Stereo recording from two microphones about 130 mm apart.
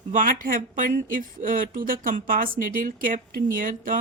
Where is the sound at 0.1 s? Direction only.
90° right.